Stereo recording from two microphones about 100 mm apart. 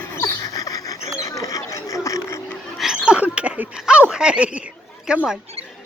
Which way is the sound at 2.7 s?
5° right (ahead or behind).